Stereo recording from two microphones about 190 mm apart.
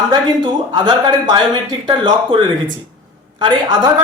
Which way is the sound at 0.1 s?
25° right (ahead or behind).